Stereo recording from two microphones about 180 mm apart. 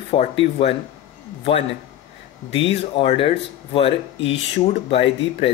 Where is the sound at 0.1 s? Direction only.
30° left (ahead or behind).